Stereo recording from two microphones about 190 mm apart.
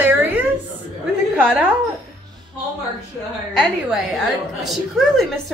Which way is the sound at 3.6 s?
Centre (ahead or behind).